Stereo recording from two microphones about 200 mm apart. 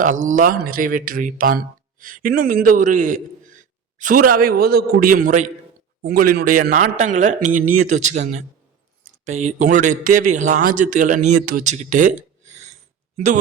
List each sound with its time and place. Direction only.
0.0 s a man's voice: 40° right (ahead or behind)